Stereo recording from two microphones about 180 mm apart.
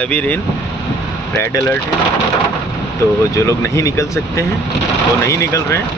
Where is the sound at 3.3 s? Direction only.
15° left (ahead or behind).